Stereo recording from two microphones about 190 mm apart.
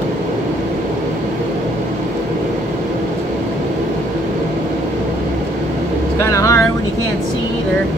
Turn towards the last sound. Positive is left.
turn(degrees=15)  # may be behind; listen again after turning